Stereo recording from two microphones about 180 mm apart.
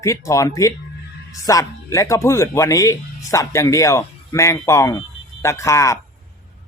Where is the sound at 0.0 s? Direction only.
15° left (ahead or behind).